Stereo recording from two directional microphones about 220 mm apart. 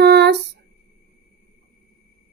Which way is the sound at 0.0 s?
50° right (ahead or behind).